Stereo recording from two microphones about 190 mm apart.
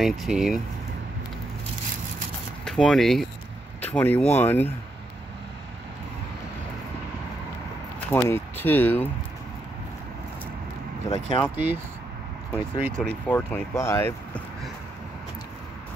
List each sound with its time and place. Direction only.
0.0 s speech: centre (ahead or behind)
2.6 s speech: 5° left (ahead or behind)
8.1 s speech: 10° left (ahead or behind)
11.1 s speech: 30° left (ahead or behind)
11.5 s speech: 10° right (ahead or behind)
12.9 s speech: 5° left (ahead or behind)